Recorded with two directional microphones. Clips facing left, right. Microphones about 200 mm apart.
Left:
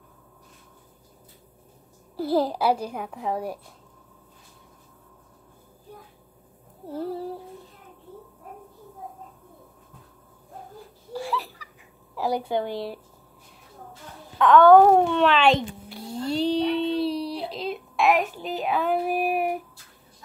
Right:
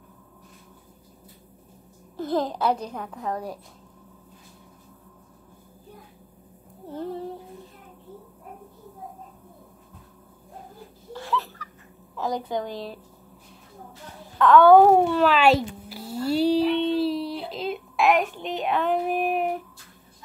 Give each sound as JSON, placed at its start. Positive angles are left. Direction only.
{"t": 2.1, "sound": "a child's voice", "side_deg": 10}
{"t": 6.9, "sound": "female singing", "side_deg": 10}
{"t": 11.1, "sound": "a sound", "side_deg": 10}
{"t": 12.2, "sound": "a woman's voice", "side_deg": 10}
{"t": 12.6, "sound": "speech", "side_deg": 65}
{"t": 14.4, "sound": "a sound", "side_deg": -5}